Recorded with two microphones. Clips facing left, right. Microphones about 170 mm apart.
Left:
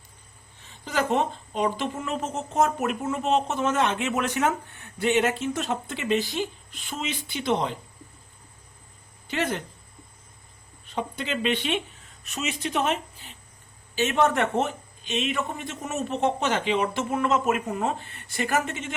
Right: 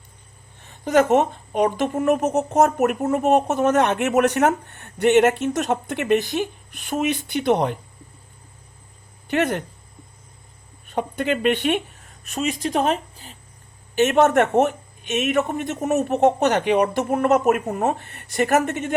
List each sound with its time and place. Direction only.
0.6 s a sound: 50° right (ahead or behind)
1.6 s speech: 50° right (ahead or behind)
9.3 s speech: 55° right (ahead or behind)
10.8 s speech: 55° right (ahead or behind); by 13.3 s 40° right (ahead or behind)
13.9 s speech: 65° right (ahead or behind)
17.5 s speech: 45° right (ahead or behind)
18.3 s speech: 60° right (ahead or behind)